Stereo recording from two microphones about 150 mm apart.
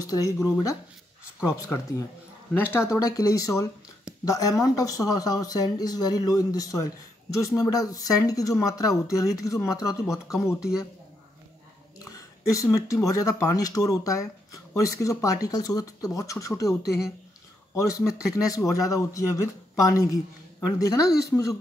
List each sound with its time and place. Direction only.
0.0 s speech: 25° left (ahead or behind)
10.1 s speech: 5° right (ahead or behind)
12.0 s speech: 20° left (ahead or behind)
17.7 s speech: 20° left (ahead or behind)
20.6 s speech: 20° left (ahead or behind)